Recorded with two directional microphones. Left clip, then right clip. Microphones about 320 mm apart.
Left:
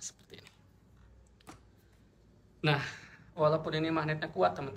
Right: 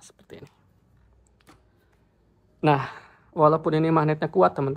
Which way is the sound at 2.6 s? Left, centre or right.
Centre.